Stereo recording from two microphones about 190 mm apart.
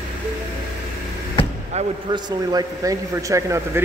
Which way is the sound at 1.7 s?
35° right (ahead or behind).